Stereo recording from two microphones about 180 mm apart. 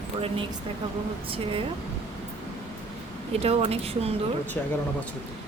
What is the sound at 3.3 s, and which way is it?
Speech, 35° right (ahead or behind).